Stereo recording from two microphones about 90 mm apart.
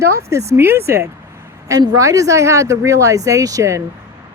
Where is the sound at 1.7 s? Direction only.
40° right (ahead or behind).